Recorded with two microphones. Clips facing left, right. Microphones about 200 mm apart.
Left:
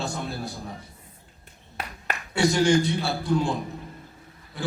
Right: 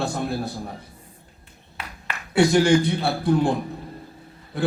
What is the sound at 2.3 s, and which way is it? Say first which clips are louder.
A man's voice: right 4 dB; 55° right (ahead or behind).